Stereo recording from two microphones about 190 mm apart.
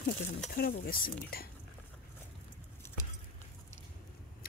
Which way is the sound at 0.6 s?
55° left (ahead or behind).